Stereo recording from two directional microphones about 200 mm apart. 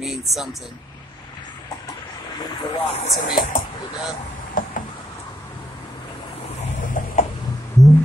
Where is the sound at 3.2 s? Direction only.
45° left (ahead or behind).